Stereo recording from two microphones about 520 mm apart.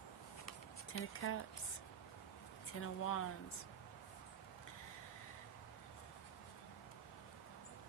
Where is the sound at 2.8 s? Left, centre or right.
Left.